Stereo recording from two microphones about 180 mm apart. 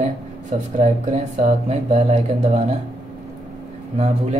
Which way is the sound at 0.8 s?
40° right (ahead or behind).